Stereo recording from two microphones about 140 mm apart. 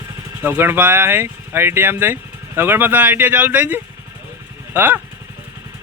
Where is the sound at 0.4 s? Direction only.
15° right (ahead or behind).